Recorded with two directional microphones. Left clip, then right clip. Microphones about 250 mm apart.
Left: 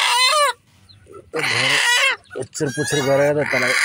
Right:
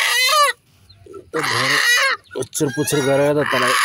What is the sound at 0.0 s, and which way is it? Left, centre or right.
Chicken, centre.